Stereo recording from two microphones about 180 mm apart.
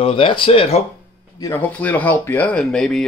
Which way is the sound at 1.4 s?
10° left (ahead or behind).